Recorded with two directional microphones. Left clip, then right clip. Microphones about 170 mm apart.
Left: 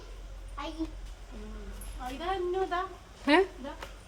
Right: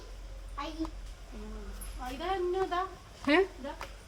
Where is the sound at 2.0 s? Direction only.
25° left (ahead or behind).